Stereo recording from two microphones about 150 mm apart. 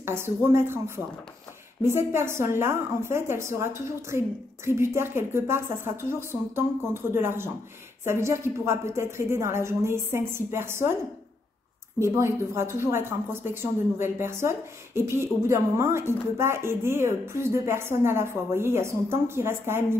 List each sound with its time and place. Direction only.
0.0 s a woman's voice: 15° right (ahead or behind)
12.0 s a woman's voice: 15° right (ahead or behind)